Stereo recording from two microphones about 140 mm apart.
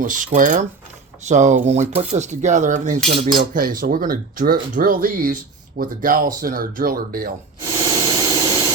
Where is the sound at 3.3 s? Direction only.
80° right.